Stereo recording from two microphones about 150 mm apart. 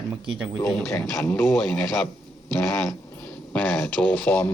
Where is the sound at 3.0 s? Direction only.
10° left (ahead or behind).